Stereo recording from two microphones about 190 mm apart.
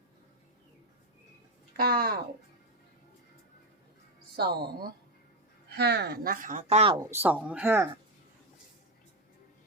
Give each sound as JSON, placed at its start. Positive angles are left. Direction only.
{"t": 1.7, "sound": "speech", "side_deg": -55}
{"t": 4.4, "sound": "speech", "side_deg": -55}
{"t": 7.0, "sound": "speech", "side_deg": -10}